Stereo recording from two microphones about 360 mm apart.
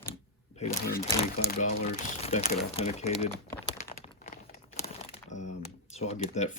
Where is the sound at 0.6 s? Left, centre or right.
Left.